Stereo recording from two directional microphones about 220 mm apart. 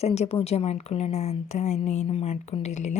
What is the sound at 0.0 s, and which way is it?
Speech, 30° left (ahead or behind).